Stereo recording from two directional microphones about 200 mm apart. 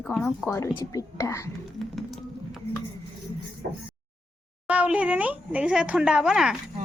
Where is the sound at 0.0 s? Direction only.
5° left (ahead or behind).